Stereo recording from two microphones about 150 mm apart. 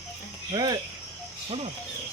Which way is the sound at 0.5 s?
30° right (ahead or behind).